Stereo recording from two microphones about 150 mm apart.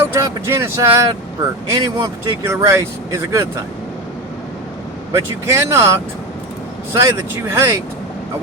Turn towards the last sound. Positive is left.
turn(degrees=-20)  # may be behind; listen again after turning